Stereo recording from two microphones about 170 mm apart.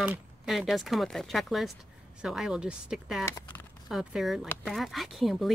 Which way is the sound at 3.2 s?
15° left (ahead or behind).